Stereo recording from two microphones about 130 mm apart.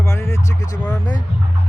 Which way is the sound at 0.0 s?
20° left (ahead or behind).